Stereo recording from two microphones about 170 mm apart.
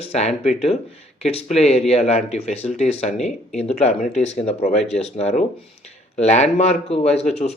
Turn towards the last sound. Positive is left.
turn(degrees=35)  # may be behind; listen again after turning